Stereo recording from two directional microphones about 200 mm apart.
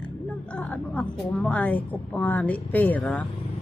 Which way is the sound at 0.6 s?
5° left (ahead or behind).